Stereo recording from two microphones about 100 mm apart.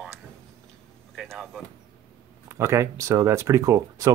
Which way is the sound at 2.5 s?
25° right (ahead or behind).